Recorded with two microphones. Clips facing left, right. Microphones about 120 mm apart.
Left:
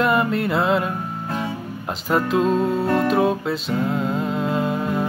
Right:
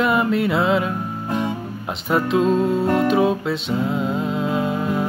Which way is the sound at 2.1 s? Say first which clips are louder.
Right 1 dB; centre (ahead or behind).